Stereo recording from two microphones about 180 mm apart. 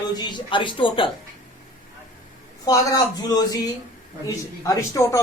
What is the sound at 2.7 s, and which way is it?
Speech, 20° left (ahead or behind).